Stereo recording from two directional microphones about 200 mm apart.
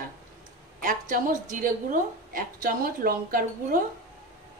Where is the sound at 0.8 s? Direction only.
40° right (ahead or behind).